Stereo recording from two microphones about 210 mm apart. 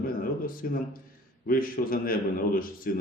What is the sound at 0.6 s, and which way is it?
A man's voice, 45° left (ahead or behind).